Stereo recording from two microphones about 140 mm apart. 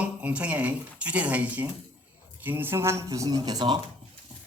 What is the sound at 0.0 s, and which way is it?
Speech, 10° right (ahead or behind).